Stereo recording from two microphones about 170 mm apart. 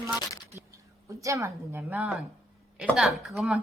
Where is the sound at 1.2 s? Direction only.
20° right (ahead or behind).